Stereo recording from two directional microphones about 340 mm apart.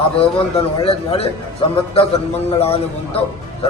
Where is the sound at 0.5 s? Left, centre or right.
Centre.